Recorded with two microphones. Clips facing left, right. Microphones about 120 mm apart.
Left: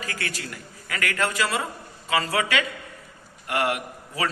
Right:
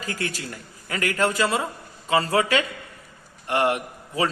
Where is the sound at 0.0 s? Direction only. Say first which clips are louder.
Right 3 dB; 30° right (ahead or behind).